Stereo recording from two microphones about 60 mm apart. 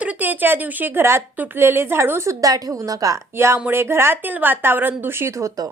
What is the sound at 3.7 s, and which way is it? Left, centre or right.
A woman's voice, right.